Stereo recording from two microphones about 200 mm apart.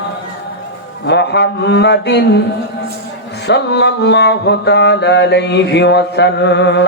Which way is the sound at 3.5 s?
55° left (ahead or behind).